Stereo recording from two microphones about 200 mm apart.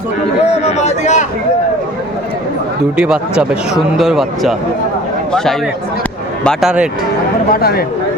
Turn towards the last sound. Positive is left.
turn(degrees=50)  # may be behind; listen again after turning